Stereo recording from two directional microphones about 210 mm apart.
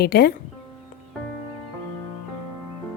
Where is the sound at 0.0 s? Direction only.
50° left (ahead or behind).